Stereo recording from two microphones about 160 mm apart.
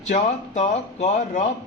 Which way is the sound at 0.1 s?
45° left (ahead or behind).